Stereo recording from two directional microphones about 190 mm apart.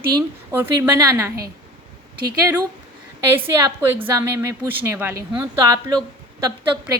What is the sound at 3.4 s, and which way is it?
A woman's voice, 15° right (ahead or behind).